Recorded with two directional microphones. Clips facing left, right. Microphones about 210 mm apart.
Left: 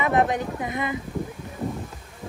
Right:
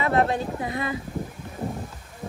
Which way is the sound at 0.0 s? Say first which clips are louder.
Even; 15° left (ahead or behind).